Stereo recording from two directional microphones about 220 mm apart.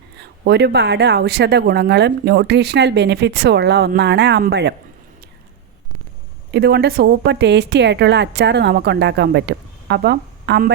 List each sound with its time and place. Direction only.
0.2 s speech: 50° right (ahead or behind)
6.5 s speech: 45° right (ahead or behind)